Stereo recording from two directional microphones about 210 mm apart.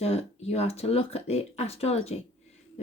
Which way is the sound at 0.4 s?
30° left (ahead or behind).